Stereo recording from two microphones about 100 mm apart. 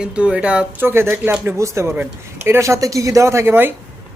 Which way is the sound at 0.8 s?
25° right (ahead or behind).